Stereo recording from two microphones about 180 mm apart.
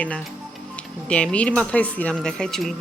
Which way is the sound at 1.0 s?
5° left (ahead or behind).